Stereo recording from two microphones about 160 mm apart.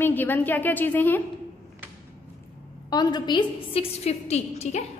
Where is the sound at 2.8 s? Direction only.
25° left (ahead or behind); by 4.8 s 45° left (ahead or behind).